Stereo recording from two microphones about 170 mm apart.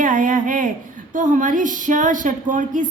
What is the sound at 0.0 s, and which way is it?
A woman's voice, 50° right (ahead or behind).